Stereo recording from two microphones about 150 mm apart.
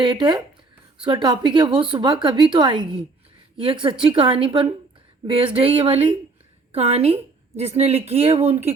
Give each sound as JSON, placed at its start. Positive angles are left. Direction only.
{"t": 0.0, "sound": "a woman's voice", "side_deg": -30}